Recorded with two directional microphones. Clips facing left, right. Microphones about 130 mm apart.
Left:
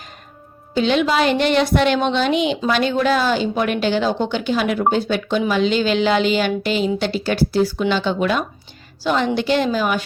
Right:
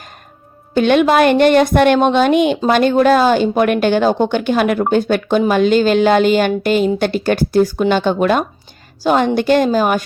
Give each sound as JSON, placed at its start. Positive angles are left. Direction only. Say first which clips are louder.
{"t": 0.7, "sound": "a woman's voice", "louder": "right 6 dB", "side_deg": -55}